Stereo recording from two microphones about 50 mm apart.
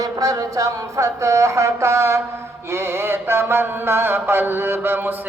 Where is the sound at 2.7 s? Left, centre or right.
Right.